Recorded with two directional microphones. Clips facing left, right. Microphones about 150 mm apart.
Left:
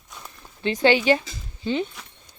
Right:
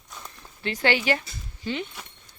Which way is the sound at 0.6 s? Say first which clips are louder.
Left 6 dB; 20° left (ahead or behind).